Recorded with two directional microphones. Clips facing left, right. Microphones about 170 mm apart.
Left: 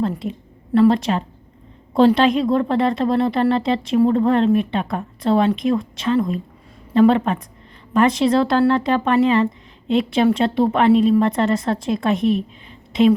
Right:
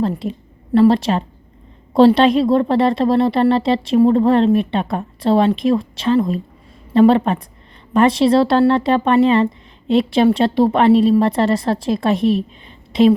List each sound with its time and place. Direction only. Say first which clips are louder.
0.0 s a woman's voice: right 2 dB; 30° right (ahead or behind)